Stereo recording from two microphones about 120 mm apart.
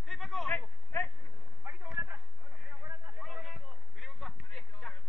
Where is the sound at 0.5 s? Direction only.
10° left (ahead or behind).